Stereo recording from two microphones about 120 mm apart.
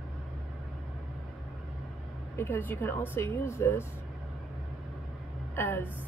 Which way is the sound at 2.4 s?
15° left (ahead or behind).